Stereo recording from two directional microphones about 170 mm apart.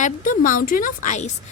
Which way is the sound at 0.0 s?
50° left (ahead or behind).